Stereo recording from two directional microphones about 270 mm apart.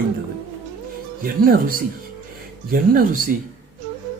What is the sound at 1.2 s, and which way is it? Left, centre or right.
A man's voice, right.